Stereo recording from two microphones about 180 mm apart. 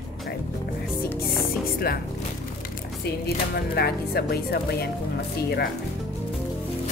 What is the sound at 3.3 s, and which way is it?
Speech, 60° left (ahead or behind).